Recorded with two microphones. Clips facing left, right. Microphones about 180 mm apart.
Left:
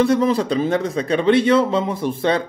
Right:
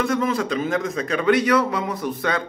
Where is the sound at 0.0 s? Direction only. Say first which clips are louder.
Left 5 dB; 30° left (ahead or behind).